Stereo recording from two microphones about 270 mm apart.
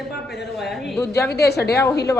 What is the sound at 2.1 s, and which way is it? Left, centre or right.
Speech, centre.